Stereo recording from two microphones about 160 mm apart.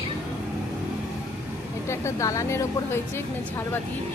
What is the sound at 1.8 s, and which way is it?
A woman's voice, 15° left (ahead or behind).